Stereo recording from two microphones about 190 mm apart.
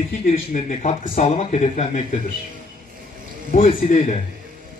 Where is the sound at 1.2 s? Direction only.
35° left (ahead or behind).